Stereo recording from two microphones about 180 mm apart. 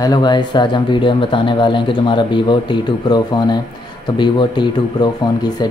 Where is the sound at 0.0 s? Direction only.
25° left (ahead or behind).